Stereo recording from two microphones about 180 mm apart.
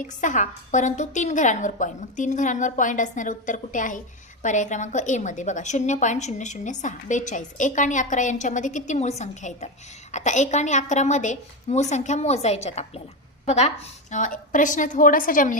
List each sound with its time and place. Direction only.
0.0 s a woman's voice: 45° left (ahead or behind)